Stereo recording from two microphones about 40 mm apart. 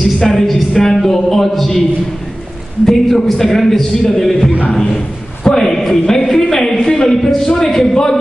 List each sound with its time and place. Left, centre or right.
0.2 s a man's voice: centre
2.8 s a man's voice: centre
4.8 s a sound: left
5.6 s a man's voice: centre